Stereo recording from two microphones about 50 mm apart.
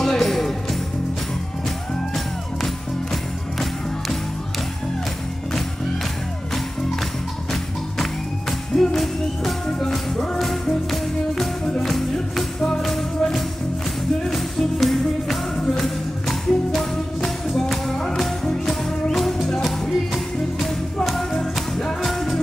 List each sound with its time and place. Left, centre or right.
0.0 s music: centre
2.1 s music: centre
8.0 s music: centre
12.5 s music: centre
12.8 s music: centre
20.5 s music: centre